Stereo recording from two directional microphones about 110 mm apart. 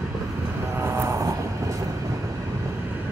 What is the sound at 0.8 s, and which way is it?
Vehicle, 25° right (ahead or behind).